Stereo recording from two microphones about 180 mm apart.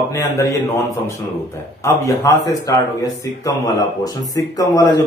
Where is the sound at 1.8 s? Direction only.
15° left (ahead or behind).